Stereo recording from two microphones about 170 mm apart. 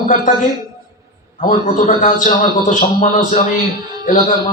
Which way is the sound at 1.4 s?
45° left (ahead or behind).